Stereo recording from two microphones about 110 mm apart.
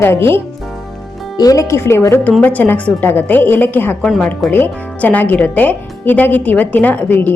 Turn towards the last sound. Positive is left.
turn(degrees=15)  # may be behind; listen again after turning